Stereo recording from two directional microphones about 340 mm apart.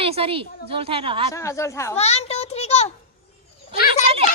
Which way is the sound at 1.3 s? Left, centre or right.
Centre.